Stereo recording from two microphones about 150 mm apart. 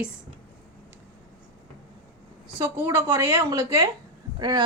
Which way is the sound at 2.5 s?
20° right (ahead or behind).